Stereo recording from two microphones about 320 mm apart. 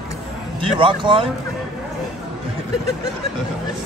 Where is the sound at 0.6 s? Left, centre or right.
Centre.